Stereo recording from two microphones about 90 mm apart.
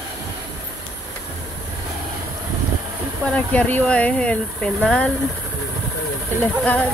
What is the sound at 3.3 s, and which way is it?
Speech, 15° left (ahead or behind).